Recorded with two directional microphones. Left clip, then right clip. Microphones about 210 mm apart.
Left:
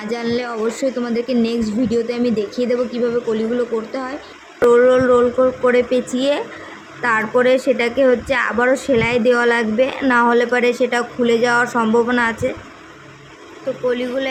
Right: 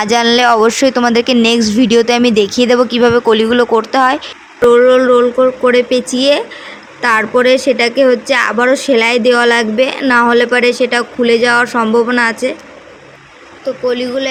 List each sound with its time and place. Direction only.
0.1 s speech: 45° right (ahead or behind)
4.7 s a woman's voice: 30° right (ahead or behind)
13.8 s a woman's voice: 25° right (ahead or behind)